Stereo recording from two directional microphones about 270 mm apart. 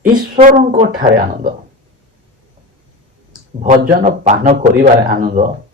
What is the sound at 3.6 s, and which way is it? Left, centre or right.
A man's voice, right.